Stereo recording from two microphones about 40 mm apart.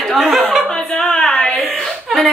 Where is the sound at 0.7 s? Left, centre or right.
Centre.